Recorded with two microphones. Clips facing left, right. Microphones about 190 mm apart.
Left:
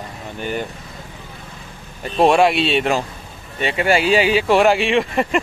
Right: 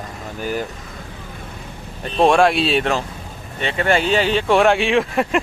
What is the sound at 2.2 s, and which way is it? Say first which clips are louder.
Speech: even; centre (ahead or behind).